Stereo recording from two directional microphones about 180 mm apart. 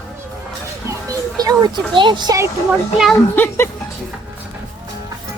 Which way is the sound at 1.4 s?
20° right (ahead or behind).